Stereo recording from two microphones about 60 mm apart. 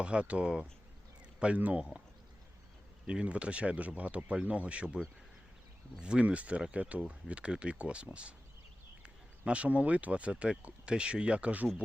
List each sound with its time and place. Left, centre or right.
0.0 s speech: centre
3.1 s speech: centre